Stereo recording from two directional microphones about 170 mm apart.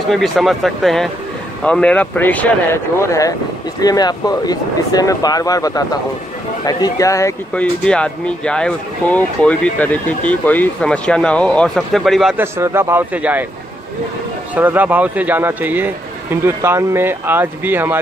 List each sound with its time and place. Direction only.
0.1 s speech: centre (ahead or behind); by 7.3 s 20° left (ahead or behind)
7.5 s speech: 5° left (ahead or behind)
12.4 s a man's voice: 15° right (ahead or behind)
14.5 s a man's voice: 10° right (ahead or behind)